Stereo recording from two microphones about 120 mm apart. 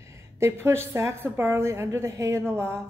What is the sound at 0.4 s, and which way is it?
A woman's voice, 20° right (ahead or behind).